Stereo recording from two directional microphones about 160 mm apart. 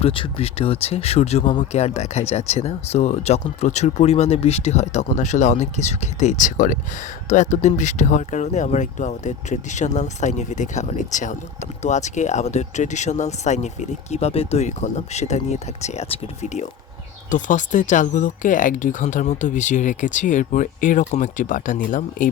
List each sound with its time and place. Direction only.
0.0 s speech: 35° left (ahead or behind); by 22.3 s 55° left (ahead or behind)